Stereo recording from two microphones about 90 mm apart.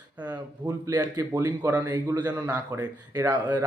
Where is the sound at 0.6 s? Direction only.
25° right (ahead or behind).